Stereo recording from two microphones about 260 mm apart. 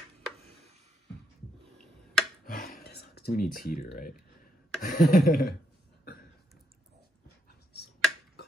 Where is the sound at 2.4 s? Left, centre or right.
Left.